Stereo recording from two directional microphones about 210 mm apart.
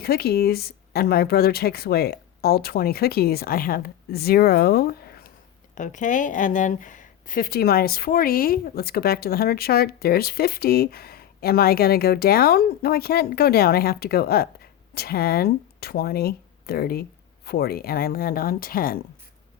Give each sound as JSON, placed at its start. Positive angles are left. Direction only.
{"t": 0.0, "sound": "speech", "side_deg": 50}
{"t": 5.7, "sound": "speech", "side_deg": 35}